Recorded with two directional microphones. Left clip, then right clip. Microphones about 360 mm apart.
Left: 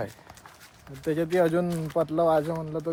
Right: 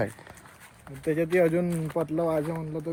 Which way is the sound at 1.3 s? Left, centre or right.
Centre.